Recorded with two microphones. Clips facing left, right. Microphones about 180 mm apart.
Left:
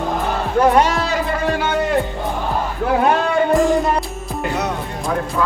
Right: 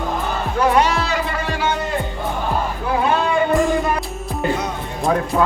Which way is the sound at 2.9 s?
60° left (ahead or behind).